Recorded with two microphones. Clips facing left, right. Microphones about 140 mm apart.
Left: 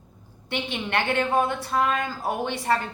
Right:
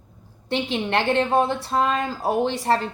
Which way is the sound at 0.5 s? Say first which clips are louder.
Right 4 dB; 30° right (ahead or behind).